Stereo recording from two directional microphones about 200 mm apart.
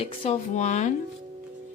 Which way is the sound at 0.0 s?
30° left (ahead or behind).